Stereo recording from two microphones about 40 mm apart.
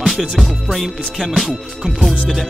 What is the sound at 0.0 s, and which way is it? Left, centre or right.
Music, centre.